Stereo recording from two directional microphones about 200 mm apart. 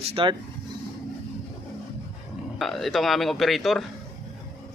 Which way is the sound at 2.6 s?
Centre (ahead or behind).